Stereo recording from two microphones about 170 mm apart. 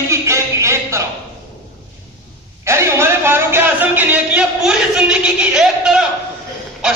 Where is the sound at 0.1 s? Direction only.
15° right (ahead or behind).